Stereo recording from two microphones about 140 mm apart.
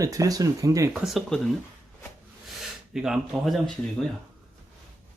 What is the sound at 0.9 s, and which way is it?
Speech, centre (ahead or behind).